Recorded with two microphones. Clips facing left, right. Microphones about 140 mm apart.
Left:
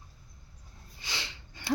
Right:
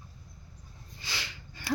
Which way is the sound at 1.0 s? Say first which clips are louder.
Even; 20° left (ahead or behind).